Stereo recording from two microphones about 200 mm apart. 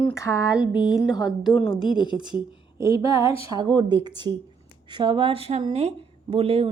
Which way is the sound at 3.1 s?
15° right (ahead or behind).